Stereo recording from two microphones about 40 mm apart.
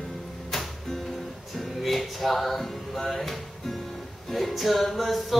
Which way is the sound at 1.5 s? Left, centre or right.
Centre.